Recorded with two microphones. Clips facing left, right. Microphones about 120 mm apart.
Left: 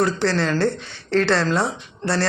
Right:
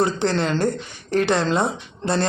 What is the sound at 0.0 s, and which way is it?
Speech, 20° right (ahead or behind).